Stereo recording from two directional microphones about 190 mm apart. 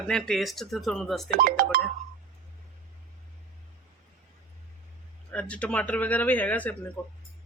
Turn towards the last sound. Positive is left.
turn(degrees=10)  # may be behind; listen again after turning